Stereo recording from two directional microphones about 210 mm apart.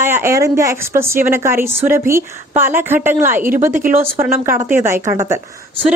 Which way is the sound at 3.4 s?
40° right (ahead or behind).